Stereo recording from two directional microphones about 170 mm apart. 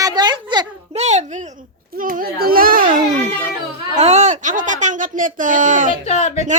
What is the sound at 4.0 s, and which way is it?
Speech, 40° right (ahead or behind).